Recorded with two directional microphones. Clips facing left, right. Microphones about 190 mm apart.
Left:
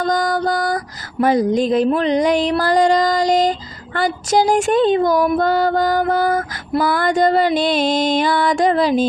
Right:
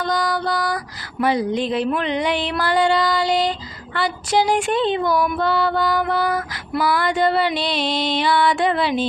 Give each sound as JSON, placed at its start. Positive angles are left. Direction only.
{"t": 0.0, "sound": "music", "side_deg": 45}
{"t": 1.2, "sound": "mantra", "side_deg": 45}
{"t": 3.9, "sound": "music", "side_deg": 45}